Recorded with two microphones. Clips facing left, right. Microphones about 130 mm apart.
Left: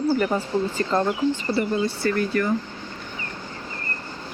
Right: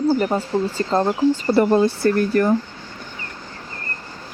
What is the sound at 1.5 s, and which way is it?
Speech, 60° right (ahead or behind).